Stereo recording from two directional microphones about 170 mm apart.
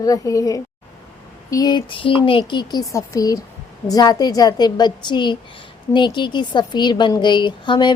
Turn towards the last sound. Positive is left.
turn(degrees=25)  # may be behind; listen again after turning